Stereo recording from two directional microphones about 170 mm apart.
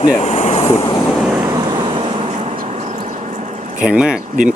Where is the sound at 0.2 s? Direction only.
40° left (ahead or behind).